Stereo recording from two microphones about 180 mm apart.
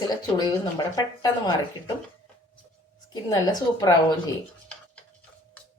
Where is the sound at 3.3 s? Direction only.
20° left (ahead or behind).